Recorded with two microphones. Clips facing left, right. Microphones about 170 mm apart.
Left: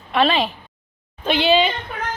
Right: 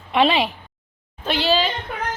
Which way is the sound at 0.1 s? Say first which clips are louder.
Even; 15° right (ahead or behind).